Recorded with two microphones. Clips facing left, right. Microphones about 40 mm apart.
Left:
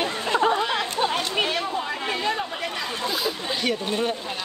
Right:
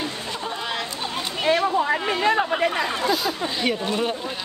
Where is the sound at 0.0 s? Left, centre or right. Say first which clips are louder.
Left 7 dB; left.